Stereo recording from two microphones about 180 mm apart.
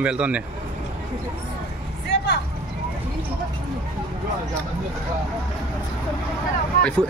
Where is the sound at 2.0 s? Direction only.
65° left (ahead or behind).